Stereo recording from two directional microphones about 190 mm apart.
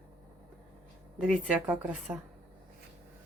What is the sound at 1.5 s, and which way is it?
Speech, 5° right (ahead or behind).